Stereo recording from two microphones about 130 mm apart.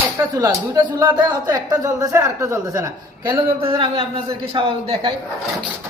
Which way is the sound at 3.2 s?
40° right (ahead or behind).